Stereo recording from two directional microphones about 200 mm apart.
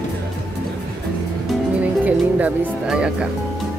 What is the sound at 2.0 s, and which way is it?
Speech, 5° right (ahead or behind).